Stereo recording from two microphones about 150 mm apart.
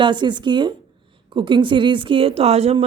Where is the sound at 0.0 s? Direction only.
30° right (ahead or behind).